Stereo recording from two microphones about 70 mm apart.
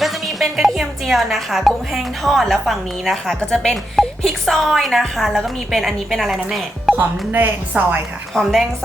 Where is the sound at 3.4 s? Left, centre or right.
Centre.